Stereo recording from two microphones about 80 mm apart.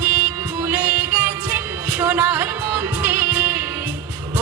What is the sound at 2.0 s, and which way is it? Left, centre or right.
Music, right.